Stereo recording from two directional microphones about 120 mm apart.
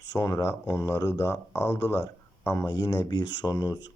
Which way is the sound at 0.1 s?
30° left (ahead or behind).